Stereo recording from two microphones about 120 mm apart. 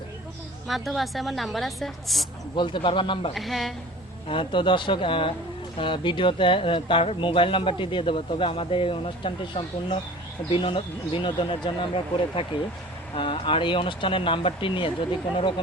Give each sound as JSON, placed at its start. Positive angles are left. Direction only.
{"t": 0.7, "sound": "a woman's voice", "side_deg": 0}
{"t": 2.6, "sound": "speech", "side_deg": 45}
{"t": 3.3, "sound": "a woman's voice", "side_deg": 0}
{"t": 4.3, "sound": "speech", "side_deg": 45}